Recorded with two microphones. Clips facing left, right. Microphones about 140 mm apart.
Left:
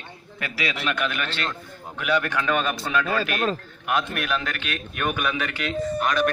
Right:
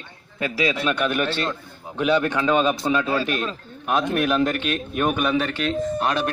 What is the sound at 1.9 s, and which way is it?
A man's voice, 25° right (ahead or behind).